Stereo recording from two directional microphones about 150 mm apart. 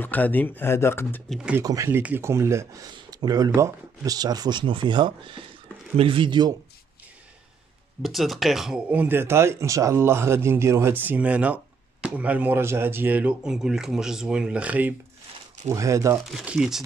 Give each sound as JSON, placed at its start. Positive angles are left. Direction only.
{"t": 0.0, "sound": "speech", "side_deg": 10}
{"t": 1.3, "sound": "speech", "side_deg": -5}
{"t": 1.6, "sound": "speech", "side_deg": -20}
{"t": 8.0, "sound": "speech", "side_deg": 0}
{"t": 15.7, "sound": "speech", "side_deg": -20}
{"t": 16.3, "sound": "speech", "side_deg": -5}